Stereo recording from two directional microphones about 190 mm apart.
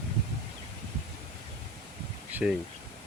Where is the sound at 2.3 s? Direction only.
10° right (ahead or behind).